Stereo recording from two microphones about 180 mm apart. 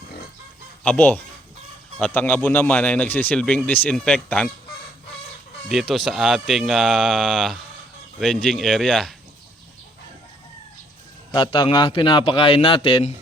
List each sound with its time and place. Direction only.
0.9 s a man's voice: 10° left (ahead or behind)
5.6 s speech: centre (ahead or behind)
11.3 s a man's voice: 25° left (ahead or behind)